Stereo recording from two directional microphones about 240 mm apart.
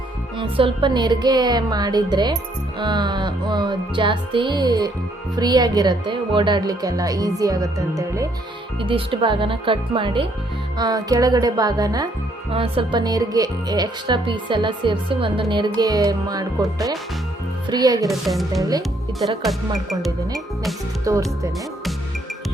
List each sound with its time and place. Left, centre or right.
0.3 s speech: right
18.1 s speech: centre
21.0 s speech: centre